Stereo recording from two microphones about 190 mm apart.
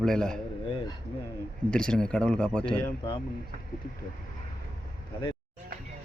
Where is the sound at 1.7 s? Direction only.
5° left (ahead or behind).